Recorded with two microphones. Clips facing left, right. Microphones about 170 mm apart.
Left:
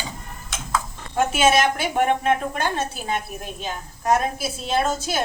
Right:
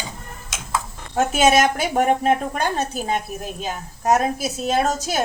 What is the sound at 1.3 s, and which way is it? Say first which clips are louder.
A woman's voice: right 3 dB; 40° right (ahead or behind).